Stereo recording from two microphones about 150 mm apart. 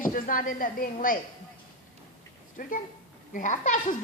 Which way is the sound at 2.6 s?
65° left (ahead or behind).